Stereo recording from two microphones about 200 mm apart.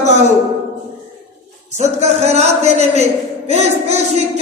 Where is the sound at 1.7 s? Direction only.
35° right (ahead or behind).